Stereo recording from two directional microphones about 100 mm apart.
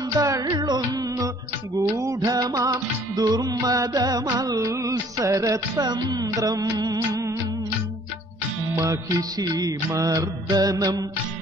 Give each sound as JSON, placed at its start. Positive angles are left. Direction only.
{"t": 0.2, "sound": "music", "side_deg": -35}
{"t": 8.8, "sound": "music", "side_deg": -35}